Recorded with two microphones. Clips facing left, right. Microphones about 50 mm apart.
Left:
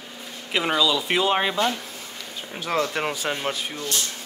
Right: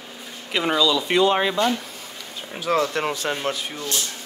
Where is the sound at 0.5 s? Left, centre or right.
Centre.